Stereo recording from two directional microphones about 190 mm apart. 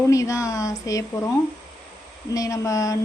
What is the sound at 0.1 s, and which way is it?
A woman's voice, 15° left (ahead or behind).